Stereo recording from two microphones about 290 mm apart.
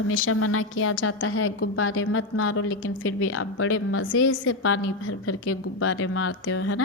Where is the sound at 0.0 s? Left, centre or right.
Left.